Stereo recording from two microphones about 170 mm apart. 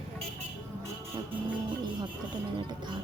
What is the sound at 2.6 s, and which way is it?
Speech, 25° right (ahead or behind).